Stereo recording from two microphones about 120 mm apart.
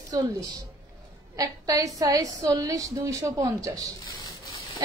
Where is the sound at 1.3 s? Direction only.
30° right (ahead or behind).